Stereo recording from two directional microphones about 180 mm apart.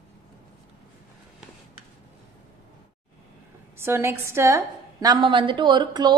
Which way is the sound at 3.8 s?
15° right (ahead or behind).